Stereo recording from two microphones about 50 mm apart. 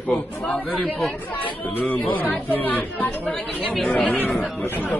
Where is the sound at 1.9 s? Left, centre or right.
Left.